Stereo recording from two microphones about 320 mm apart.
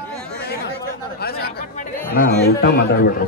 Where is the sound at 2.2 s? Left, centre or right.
Left.